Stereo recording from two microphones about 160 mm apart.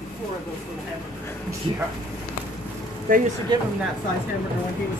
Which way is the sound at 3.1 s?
60° right (ahead or behind).